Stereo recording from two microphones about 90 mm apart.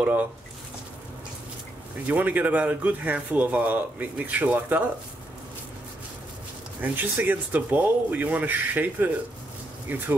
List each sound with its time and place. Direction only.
0.0 s speech: 20° right (ahead or behind)
2.0 s speech: 20° right (ahead or behind)
6.8 s speech: 20° right (ahead or behind)